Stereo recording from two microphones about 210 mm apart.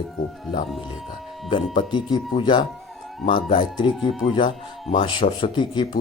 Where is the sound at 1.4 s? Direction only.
25° left (ahead or behind).